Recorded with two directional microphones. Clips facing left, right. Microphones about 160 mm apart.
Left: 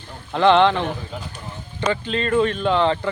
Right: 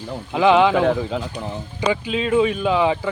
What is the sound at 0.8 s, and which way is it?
Speech, 90° right.